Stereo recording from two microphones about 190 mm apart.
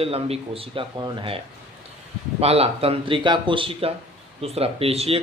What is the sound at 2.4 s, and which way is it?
A man's voice, 30° right (ahead or behind).